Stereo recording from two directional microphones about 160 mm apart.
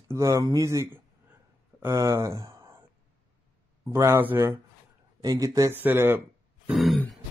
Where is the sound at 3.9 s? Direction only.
15° right (ahead or behind).